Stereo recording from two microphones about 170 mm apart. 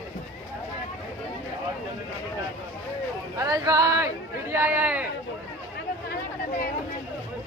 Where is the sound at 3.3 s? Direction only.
20° right (ahead or behind).